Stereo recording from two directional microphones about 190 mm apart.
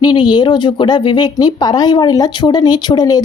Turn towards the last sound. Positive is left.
turn(degrees=20)  # may be behind; listen again after turning